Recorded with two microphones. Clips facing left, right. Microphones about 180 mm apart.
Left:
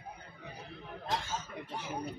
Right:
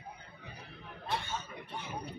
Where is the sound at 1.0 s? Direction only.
90° left.